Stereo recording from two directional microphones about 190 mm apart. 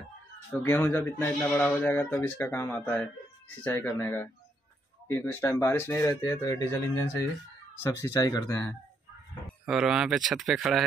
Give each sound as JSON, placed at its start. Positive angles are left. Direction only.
{"t": 0.5, "sound": "speech", "side_deg": 10}
{"t": 9.7, "sound": "speech", "side_deg": -5}